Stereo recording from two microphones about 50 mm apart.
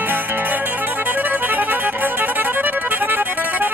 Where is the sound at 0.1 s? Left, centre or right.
Right.